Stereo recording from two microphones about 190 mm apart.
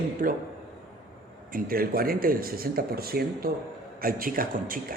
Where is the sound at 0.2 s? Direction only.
50° right (ahead or behind).